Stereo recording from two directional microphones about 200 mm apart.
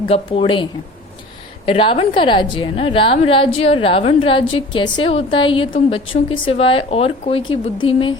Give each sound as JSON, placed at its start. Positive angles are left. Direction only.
{"t": 0.1, "sound": "a woman's voice", "side_deg": 25}